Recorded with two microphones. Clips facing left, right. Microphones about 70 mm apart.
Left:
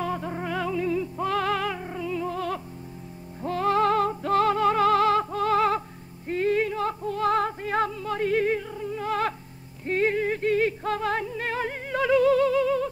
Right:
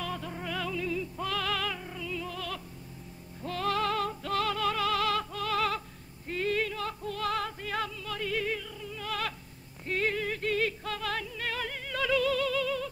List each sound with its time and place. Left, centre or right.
0.0 s music: left